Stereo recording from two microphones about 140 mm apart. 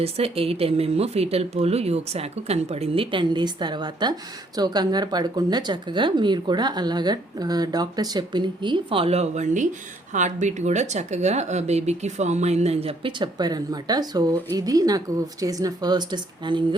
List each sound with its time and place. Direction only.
0.0 s speech: 45° right (ahead or behind)